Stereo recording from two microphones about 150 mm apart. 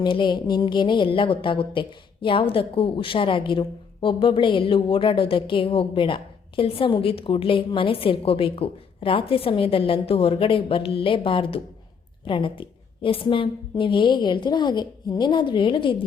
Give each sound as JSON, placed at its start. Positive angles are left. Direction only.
{"t": 0.0, "sound": "a woman's voice", "side_deg": 30}